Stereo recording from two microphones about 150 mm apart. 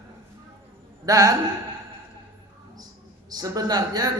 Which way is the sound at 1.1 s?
25° right (ahead or behind).